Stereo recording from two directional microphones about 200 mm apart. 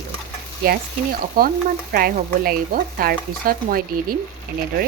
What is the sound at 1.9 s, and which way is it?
Stir, 50° right (ahead or behind).